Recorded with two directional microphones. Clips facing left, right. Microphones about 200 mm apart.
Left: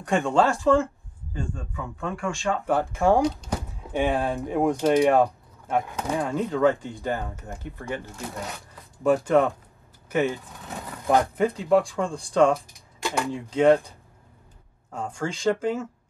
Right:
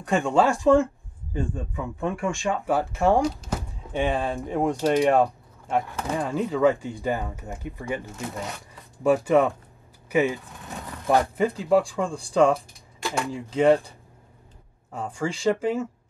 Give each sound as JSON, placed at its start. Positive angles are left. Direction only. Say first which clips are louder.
{"t": 0.0, "sound": "speech", "louder": "even", "side_deg": 0}
{"t": 0.5, "sound": "speech", "louder": "right 2 dB", "side_deg": -15}
{"t": 2.6, "sound": "speech", "louder": "even", "side_deg": 0}
{"t": 5.9, "sound": "speech", "louder": "left 1 dB", "side_deg": 15}
{"t": 6.1, "sound": "speech", "louder": "even", "side_deg": 0}
{"t": 7.5, "sound": "speech", "louder": "right 2 dB", "side_deg": -15}
{"t": 8.1, "sound": "speech", "louder": "right 2 dB", "side_deg": 0}
{"t": 10.0, "sound": "vehicle", "louder": "right 2 dB", "side_deg": -5}
{"t": 11.1, "sound": "speech", "louder": "even", "side_deg": 0}
{"t": 14.9, "sound": "speech", "louder": "right 1 dB", "side_deg": -5}